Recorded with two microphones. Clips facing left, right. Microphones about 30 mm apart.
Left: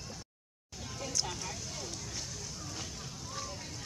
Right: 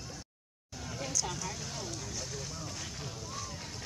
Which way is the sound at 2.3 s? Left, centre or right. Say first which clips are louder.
Right 3 dB; right.